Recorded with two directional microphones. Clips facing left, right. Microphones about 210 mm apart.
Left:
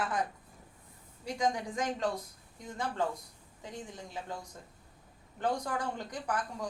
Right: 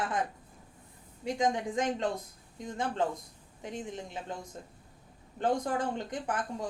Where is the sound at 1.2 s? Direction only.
20° right (ahead or behind).